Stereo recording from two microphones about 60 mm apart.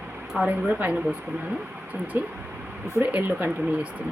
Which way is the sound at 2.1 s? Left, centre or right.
Right.